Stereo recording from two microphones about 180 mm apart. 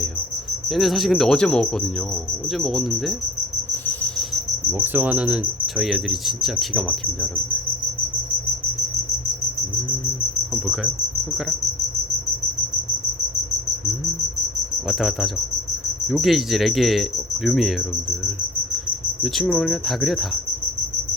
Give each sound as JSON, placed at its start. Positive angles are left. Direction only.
{"t": 0.7, "sound": "cricket", "side_deg": 0}
{"t": 4.8, "sound": "cricket", "side_deg": -10}
{"t": 14.8, "sound": "cricket", "side_deg": 0}
{"t": 19.2, "sound": "cricket", "side_deg": 0}